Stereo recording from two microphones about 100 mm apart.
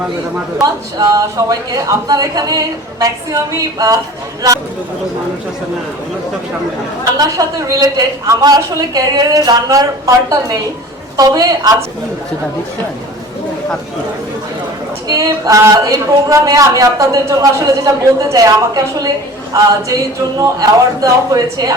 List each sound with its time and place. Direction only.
0.6 s a man's voice: 40° right (ahead or behind)
7.2 s a man's voice: 35° right (ahead or behind)
15.0 s a man's voice: 35° right (ahead or behind)